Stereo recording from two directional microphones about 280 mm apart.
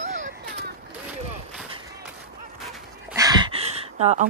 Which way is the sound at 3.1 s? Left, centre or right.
Centre.